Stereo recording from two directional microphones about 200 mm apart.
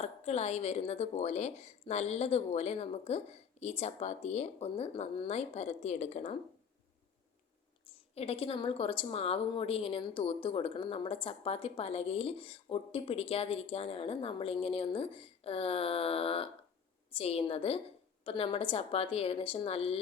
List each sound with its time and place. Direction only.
0.0 s a woman's voice: 35° left (ahead or behind)
8.1 s a woman's voice: 30° left (ahead or behind)